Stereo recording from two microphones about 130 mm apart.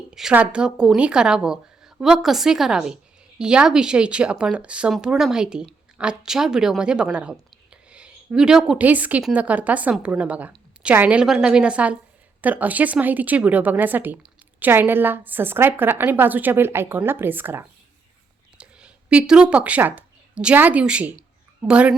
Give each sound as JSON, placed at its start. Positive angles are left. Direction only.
{"t": 0.1, "sound": "a woman's voice", "side_deg": -5}